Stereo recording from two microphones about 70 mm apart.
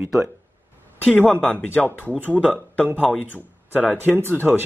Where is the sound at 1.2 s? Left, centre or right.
Centre.